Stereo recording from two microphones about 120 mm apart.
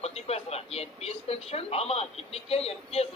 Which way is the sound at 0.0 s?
60° left (ahead or behind).